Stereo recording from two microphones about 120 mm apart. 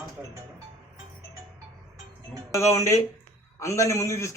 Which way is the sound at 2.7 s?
25° left (ahead or behind).